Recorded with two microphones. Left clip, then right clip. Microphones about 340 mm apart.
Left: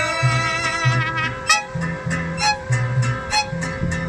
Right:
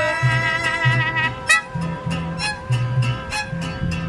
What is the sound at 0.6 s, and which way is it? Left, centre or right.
Music, right.